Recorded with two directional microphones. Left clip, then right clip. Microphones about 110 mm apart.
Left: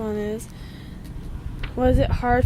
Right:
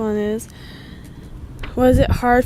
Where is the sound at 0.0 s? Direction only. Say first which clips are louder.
Right 6 dB; 30° right (ahead or behind).